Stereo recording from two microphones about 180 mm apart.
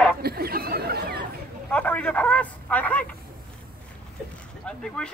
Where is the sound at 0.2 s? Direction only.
60° right (ahead or behind).